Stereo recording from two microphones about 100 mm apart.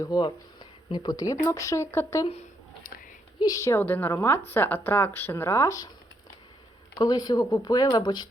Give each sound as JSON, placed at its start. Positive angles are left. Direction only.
{"t": 0.0, "sound": "speech", "side_deg": 45}
{"t": 3.4, "sound": "speech", "side_deg": 35}
{"t": 3.8, "sound": "a woman's voice", "side_deg": 20}
{"t": 7.0, "sound": "speech", "side_deg": 45}